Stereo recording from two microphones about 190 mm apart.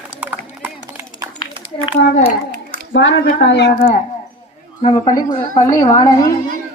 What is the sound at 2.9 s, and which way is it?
Speech, 80° left.